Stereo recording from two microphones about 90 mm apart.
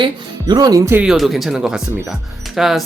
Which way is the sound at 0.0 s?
50° right (ahead or behind).